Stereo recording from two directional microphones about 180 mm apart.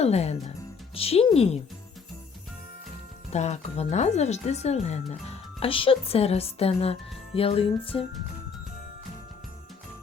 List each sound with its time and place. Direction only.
0.0 s speech: 35° left (ahead or behind)
3.3 s speech: 40° left (ahead or behind)